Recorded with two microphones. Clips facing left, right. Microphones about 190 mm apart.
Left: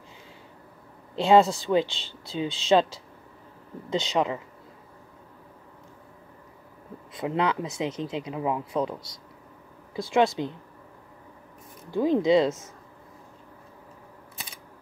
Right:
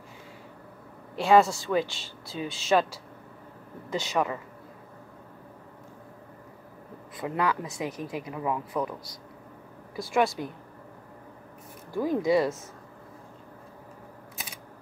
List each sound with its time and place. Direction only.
1.1 s speech: 25° left (ahead or behind)
7.2 s speech: 20° left (ahead or behind)
9.9 s speech: 25° left (ahead or behind)
11.9 s speech: 20° left (ahead or behind)